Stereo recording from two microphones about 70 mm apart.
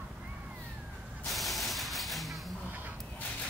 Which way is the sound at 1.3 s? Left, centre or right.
Centre.